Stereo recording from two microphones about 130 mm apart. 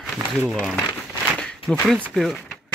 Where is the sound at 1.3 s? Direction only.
5° left (ahead or behind).